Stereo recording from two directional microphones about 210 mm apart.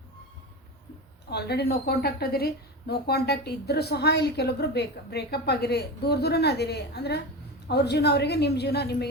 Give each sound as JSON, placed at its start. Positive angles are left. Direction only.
{"t": 1.3, "sound": "a woman's voice", "side_deg": 50}